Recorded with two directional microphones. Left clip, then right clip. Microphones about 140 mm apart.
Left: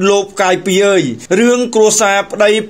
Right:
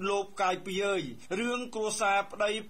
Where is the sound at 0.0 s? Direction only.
20° left (ahead or behind).